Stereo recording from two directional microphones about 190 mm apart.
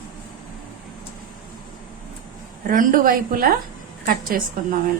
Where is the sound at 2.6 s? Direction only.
45° right (ahead or behind).